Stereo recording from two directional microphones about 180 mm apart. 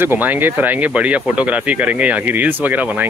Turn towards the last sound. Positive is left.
turn(degrees=-10)  # may be behind; listen again after turning